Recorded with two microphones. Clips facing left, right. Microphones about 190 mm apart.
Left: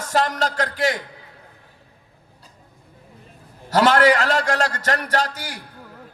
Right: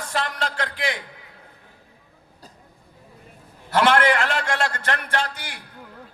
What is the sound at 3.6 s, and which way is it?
A man's voice, 40° left (ahead or behind).